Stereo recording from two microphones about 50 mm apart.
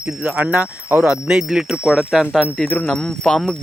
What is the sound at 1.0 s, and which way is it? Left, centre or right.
Speech, centre.